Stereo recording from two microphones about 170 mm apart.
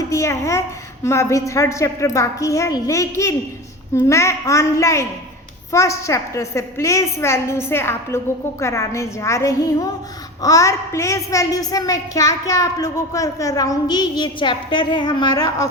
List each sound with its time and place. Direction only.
0.1 s a woman's voice: 15° left (ahead or behind)